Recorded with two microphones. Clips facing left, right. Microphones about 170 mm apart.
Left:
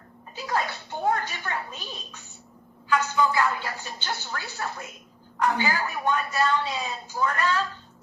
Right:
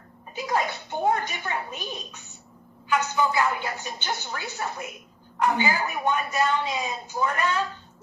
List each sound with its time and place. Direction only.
0.3 s a woman's voice: 15° right (ahead or behind)